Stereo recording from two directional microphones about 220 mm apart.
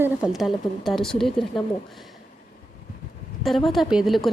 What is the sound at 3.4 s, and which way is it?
Speech, centre (ahead or behind).